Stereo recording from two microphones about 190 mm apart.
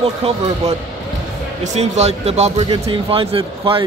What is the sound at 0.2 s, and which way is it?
Speech, 30° right (ahead or behind).